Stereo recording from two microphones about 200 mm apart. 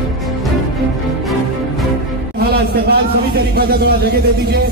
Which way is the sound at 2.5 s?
50° right (ahead or behind).